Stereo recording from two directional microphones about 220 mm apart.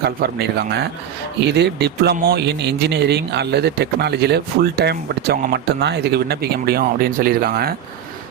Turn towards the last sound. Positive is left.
turn(degrees=-40)  # may be behind; listen again after turning